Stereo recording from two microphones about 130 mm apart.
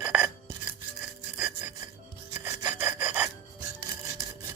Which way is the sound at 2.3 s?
20° right (ahead or behind).